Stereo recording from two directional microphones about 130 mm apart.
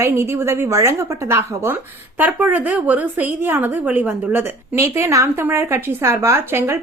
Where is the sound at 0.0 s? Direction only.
20° right (ahead or behind).